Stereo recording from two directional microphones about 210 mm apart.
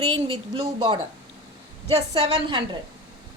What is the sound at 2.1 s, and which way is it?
Speech, 25° right (ahead or behind).